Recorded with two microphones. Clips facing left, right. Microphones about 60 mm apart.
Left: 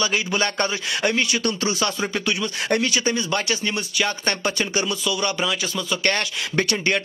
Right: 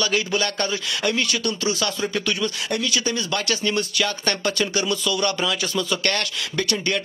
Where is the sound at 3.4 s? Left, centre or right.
Centre.